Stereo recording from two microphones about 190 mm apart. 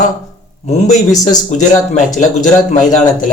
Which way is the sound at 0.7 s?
40° left (ahead or behind).